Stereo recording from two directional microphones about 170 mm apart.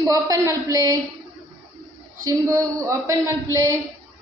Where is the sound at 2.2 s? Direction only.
20° right (ahead or behind).